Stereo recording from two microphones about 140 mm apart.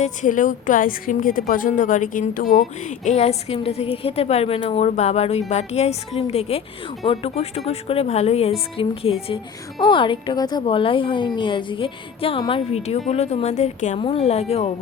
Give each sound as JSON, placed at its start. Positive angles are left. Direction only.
{"t": 0.0, "sound": "a woman's voice", "side_deg": 65}
{"t": 14.0, "sound": "speech", "side_deg": 45}